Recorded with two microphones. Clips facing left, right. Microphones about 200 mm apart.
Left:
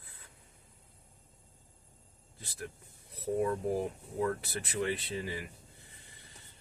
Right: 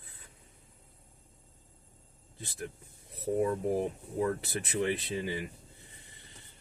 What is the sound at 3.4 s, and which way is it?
Speech, 25° right (ahead or behind).